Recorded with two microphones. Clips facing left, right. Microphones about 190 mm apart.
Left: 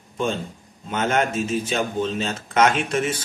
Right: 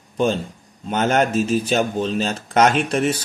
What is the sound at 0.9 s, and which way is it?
A man's voice, 35° right (ahead or behind).